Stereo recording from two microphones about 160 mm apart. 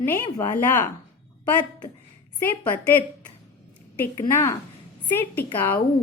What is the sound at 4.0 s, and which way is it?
A woman's voice, 15° left (ahead or behind).